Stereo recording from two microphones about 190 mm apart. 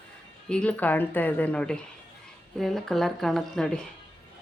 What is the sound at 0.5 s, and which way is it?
A woman's voice, 5° left (ahead or behind).